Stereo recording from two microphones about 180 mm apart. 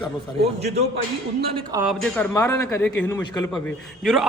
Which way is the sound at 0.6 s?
35° right (ahead or behind).